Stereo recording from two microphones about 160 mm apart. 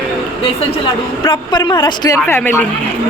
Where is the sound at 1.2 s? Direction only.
30° left (ahead or behind).